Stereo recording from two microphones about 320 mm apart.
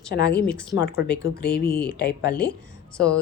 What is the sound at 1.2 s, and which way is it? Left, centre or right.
Speech, left.